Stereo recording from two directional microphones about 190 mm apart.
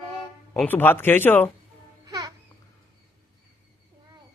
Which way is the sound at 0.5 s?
10° left (ahead or behind).